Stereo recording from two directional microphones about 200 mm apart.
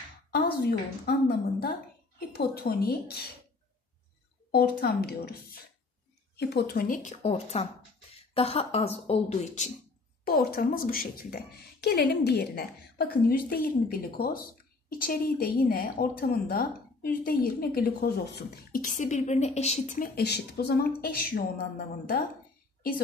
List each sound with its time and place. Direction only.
0.3 s a woman's voice: 50° left (ahead or behind)
4.5 s a woman's voice: 50° left (ahead or behind); by 9.7 s 35° left (ahead or behind)
10.2 s a woman's voice: 50° left (ahead or behind)
20.2 s a woman's voice: 55° left (ahead or behind)